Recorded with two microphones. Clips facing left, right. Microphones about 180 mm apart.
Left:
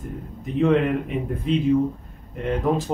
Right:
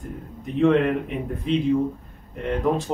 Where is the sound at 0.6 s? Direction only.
Centre (ahead or behind).